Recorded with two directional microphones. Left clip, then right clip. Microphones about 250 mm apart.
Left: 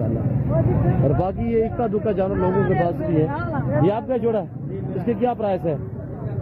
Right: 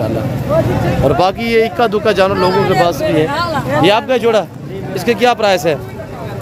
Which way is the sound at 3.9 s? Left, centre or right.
Centre.